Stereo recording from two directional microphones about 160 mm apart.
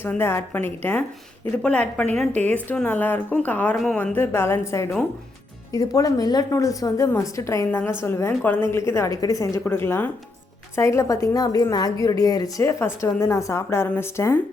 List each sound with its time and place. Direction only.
0.0 s a woman's voice: 15° left (ahead or behind)